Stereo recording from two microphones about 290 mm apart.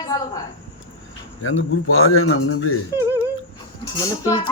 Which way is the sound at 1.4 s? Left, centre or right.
Left.